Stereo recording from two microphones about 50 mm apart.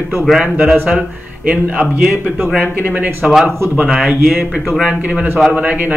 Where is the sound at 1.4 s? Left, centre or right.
Right.